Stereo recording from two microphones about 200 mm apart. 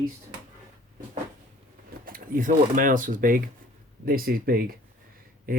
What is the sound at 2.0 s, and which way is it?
Speech, 45° right (ahead or behind).